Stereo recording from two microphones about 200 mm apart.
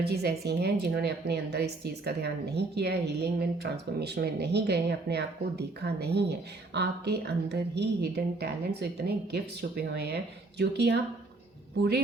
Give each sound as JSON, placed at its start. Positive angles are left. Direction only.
{"t": 0.0, "sound": "a woman's voice", "side_deg": -55}